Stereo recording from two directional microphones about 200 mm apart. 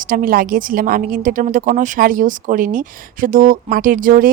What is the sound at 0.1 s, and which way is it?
A woman's voice, 45° right (ahead or behind).